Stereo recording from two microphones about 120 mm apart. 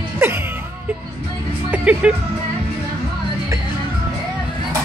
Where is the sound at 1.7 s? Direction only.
10° right (ahead or behind).